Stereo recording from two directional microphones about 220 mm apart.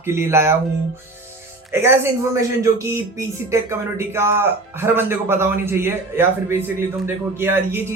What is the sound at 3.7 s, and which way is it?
A man's voice, 10° right (ahead or behind).